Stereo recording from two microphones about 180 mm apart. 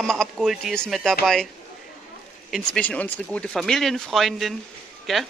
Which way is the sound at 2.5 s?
5° left (ahead or behind).